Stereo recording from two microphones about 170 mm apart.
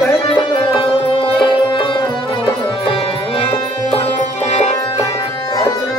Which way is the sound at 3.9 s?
40° left (ahead or behind).